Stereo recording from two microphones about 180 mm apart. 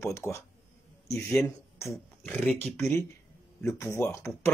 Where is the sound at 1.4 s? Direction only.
15° left (ahead or behind).